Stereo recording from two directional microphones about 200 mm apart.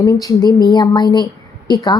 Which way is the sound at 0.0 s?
15° left (ahead or behind).